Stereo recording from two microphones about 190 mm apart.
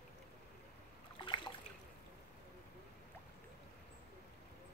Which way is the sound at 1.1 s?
25° left (ahead or behind).